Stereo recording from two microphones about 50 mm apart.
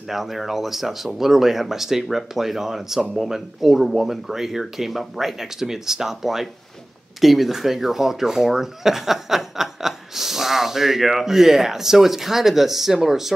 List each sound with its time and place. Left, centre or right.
0.1 s speech: centre